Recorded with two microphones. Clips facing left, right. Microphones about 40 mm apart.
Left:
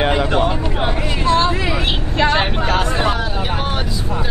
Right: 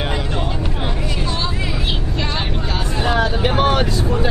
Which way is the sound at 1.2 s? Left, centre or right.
Left.